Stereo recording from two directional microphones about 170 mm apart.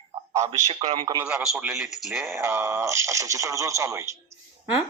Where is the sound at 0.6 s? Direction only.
35° right (ahead or behind).